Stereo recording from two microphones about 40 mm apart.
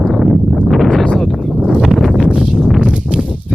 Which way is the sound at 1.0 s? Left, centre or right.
Centre.